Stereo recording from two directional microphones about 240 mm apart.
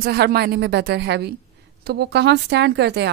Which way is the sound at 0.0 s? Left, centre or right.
Right.